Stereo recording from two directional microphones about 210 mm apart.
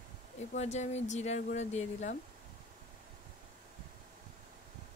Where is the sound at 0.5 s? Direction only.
35° left (ahead or behind).